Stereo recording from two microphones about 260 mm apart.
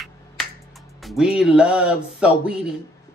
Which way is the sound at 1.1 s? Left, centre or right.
Centre.